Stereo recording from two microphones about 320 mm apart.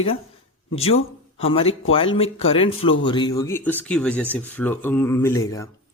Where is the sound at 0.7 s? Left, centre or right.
Centre.